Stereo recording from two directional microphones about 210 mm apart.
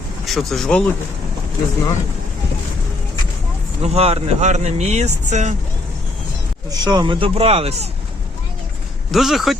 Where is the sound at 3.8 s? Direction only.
30° right (ahead or behind).